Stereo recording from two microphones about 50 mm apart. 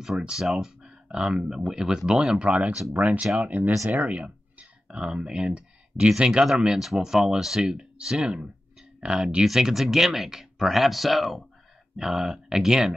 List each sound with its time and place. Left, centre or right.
0.2 s speech: centre
12.0 s speech: centre